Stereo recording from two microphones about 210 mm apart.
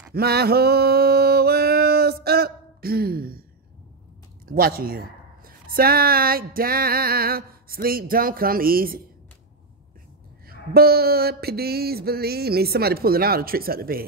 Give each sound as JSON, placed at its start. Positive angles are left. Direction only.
{"t": 0.1, "sound": "a sound", "side_deg": -50}
{"t": 4.5, "sound": "speech", "side_deg": -45}
{"t": 10.5, "sound": "speech", "side_deg": -45}